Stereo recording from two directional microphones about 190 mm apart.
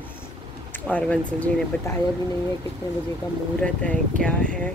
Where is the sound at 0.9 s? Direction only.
5° left (ahead or behind).